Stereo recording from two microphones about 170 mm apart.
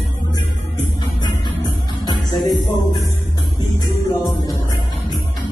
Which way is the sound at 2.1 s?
25° left (ahead or behind).